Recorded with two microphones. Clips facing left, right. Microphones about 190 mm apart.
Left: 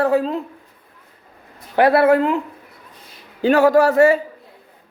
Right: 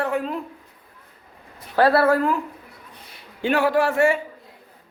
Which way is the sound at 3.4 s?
40° left (ahead or behind).